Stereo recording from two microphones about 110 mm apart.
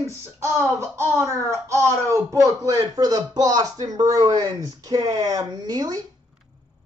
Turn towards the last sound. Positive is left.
turn(degrees=-35)  # may be behind; listen again after turning